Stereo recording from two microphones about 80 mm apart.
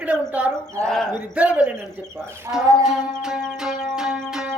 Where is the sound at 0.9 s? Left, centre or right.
Centre.